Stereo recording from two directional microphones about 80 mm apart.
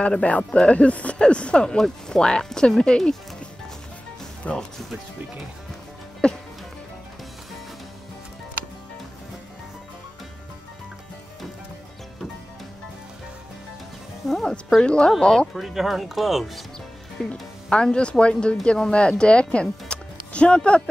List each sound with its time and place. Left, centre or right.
0.0 s speech: centre
4.4 s speech: centre
6.2 s speech: centre
14.2 s music: centre
14.8 s speech: centre
15.6 s speech: centre
17.3 s speech: centre